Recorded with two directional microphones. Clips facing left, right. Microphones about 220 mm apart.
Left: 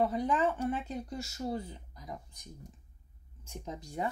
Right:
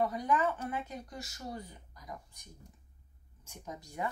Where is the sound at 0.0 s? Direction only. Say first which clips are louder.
Left 2 dB; 25° left (ahead or behind).